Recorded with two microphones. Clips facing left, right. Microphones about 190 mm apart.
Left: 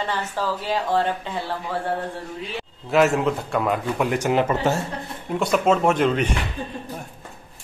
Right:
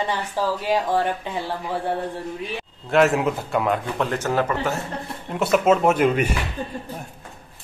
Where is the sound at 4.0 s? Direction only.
15° left (ahead or behind).